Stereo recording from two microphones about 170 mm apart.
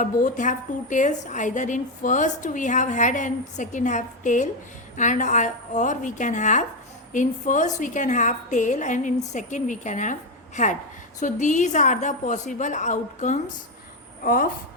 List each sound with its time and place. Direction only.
0.0 s a woman's voice: 50° left (ahead or behind)